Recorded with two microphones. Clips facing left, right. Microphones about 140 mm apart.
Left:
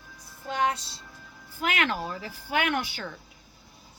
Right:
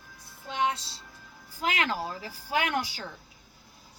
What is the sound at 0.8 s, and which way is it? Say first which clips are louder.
A woman's voice: left 2 dB; 35° right (ahead or behind).